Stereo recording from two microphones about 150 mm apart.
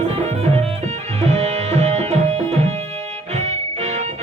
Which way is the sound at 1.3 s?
45° right (ahead or behind).